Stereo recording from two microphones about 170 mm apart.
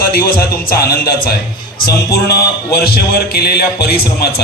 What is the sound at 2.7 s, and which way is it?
A man's voice, 65° left (ahead or behind).